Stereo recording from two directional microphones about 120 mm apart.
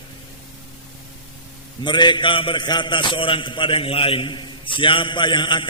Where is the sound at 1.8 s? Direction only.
40° left (ahead or behind).